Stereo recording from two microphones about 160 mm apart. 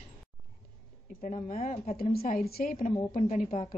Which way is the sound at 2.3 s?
65° left (ahead or behind).